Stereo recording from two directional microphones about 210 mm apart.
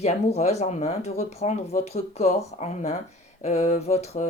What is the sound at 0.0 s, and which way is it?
Speech, 30° left (ahead or behind).